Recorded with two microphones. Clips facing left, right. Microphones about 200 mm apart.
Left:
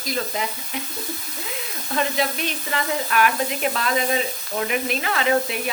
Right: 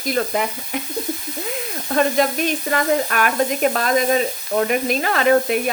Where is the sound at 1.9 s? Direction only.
50° right (ahead or behind).